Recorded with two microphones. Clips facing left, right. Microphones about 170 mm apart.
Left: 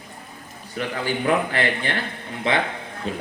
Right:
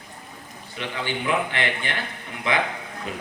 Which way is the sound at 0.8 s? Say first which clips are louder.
Left 4 dB; 40° left (ahead or behind).